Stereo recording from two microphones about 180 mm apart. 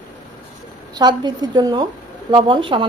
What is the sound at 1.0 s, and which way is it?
Speech, 25° right (ahead or behind).